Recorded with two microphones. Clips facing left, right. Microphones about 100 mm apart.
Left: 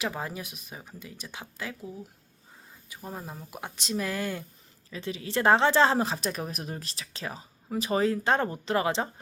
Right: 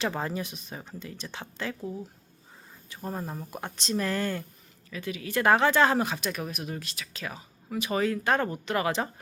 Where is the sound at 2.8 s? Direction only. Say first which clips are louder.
Right 4 dB; 10° left (ahead or behind).